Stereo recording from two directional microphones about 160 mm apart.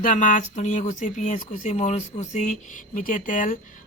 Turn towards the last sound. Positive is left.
turn(degrees=55)  # may be behind; listen again after turning